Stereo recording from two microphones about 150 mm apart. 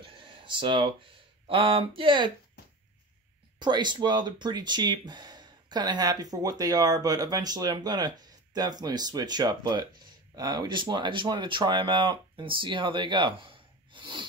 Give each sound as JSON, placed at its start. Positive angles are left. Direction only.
{"t": 0.0, "sound": "a sound", "side_deg": -35}
{"t": 1.5, "sound": "speech", "side_deg": -35}
{"t": 3.5, "sound": "speech", "side_deg": -30}